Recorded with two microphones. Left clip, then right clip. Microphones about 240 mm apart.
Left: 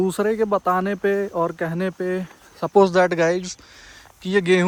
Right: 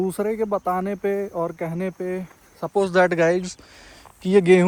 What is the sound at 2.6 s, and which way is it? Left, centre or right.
Speech, left.